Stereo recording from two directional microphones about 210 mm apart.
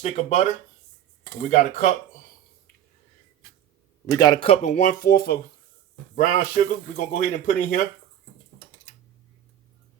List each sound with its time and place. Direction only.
0.0 s speech: 30° left (ahead or behind)
1.5 s speech: 40° left (ahead or behind)
4.0 s speech: 20° left (ahead or behind); by 7.8 s 40° left (ahead or behind)